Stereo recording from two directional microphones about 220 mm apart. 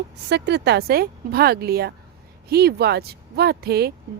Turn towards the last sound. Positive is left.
turn(degrees=-45)  # may be behind; listen again after turning